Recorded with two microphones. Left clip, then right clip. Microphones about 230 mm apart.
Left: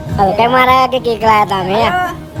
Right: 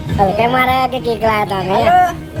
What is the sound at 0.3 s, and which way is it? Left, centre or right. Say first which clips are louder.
Speech: left 7 dB; centre.